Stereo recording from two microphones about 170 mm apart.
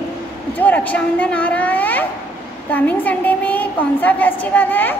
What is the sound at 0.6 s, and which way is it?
A woman's voice, 10° left (ahead or behind).